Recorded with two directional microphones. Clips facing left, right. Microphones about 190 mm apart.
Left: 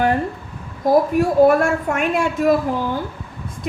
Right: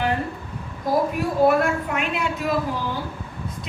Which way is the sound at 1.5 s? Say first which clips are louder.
Left 4 dB; 45° left (ahead or behind).